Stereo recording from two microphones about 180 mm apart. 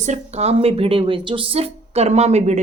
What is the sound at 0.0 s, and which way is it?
A woman's voice, 40° right (ahead or behind).